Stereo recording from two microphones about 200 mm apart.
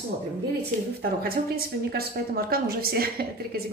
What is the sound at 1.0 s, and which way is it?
Speech, 50° right (ahead or behind).